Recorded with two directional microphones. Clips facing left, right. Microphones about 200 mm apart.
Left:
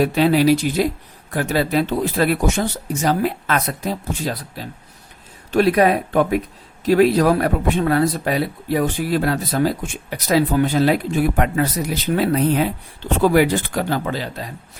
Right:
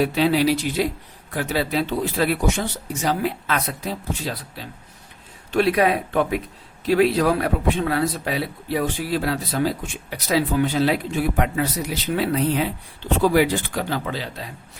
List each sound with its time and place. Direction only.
0.0 s speech: 50° left (ahead or behind)